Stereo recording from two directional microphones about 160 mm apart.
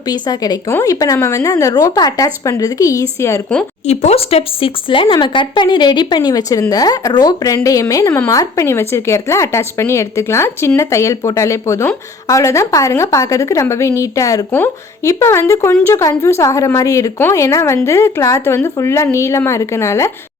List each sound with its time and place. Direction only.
0.1 s speech: 25° left (ahead or behind)
3.8 s a woman's voice: 40° left (ahead or behind); by 20.1 s 15° left (ahead or behind)